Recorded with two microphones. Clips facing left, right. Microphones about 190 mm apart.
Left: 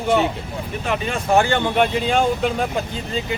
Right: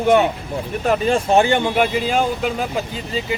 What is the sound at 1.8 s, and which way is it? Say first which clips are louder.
Speech: even; 5° right (ahead or behind).